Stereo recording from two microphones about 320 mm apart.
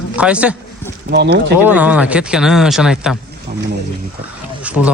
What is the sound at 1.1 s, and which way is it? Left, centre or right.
Speech, right.